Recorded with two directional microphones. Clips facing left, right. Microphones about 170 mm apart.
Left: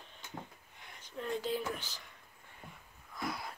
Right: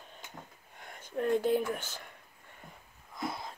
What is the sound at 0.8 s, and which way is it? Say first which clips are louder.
Speech: right 9 dB; 50° right (ahead or behind).